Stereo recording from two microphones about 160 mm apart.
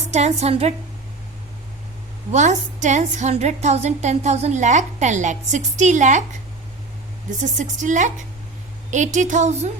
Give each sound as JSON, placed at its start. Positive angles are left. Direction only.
{"t": 0.1, "sound": "a woman's voice", "side_deg": -45}
{"t": 2.3, "sound": "a woman's voice", "side_deg": -50}
{"t": 7.3, "sound": "a woman's voice", "side_deg": -50}